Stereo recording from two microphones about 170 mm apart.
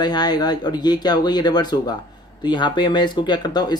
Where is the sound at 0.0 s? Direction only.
25° left (ahead or behind).